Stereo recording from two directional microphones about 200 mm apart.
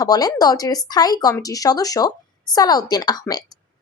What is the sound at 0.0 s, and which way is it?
Speech, 20° left (ahead or behind).